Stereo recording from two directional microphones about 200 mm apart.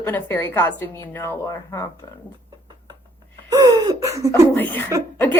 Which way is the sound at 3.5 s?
20° right (ahead or behind).